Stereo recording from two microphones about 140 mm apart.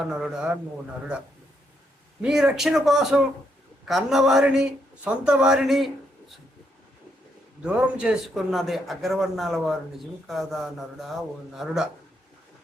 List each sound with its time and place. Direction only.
0.0 s a man's voice: 5° right (ahead or behind)
2.2 s a man's voice: 5° right (ahead or behind)
7.6 s a man's voice: 5° right (ahead or behind)